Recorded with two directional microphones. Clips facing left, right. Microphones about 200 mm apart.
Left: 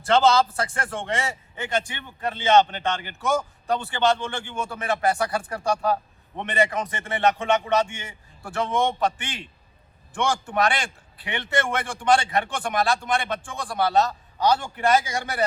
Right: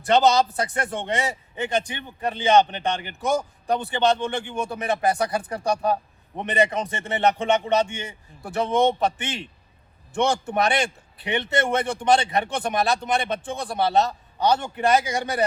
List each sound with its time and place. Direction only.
0.0 s a man's voice: 15° right (ahead or behind)